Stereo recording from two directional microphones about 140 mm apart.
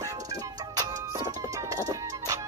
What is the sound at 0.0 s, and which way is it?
Music, 25° right (ahead or behind).